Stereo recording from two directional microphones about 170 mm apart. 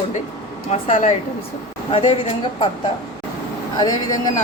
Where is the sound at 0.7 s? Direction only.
40° left (ahead or behind).